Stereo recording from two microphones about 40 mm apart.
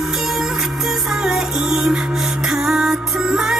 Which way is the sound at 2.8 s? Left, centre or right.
Right.